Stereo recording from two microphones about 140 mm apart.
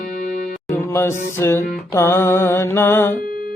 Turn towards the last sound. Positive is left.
turn(degrees=15)  # may be behind; listen again after turning